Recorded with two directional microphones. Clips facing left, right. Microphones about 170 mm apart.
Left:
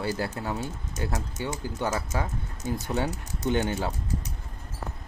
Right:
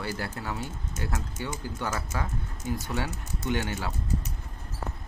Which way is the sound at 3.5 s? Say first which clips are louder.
Left 5 dB; 20° left (ahead or behind).